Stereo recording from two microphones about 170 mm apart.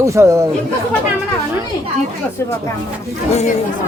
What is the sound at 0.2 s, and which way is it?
Speech, 15° right (ahead or behind).